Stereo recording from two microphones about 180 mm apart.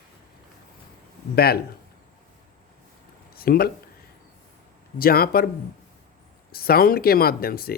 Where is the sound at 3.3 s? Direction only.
55° left (ahead or behind).